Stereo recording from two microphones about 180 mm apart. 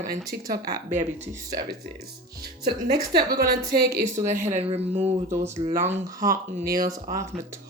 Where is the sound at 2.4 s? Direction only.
60° right (ahead or behind).